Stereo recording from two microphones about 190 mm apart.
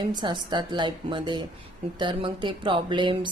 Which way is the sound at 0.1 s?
25° right (ahead or behind).